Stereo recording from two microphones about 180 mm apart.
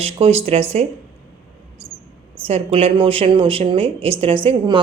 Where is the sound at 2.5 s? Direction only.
35° right (ahead or behind).